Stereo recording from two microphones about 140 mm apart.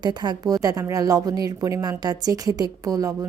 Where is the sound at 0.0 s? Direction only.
30° right (ahead or behind).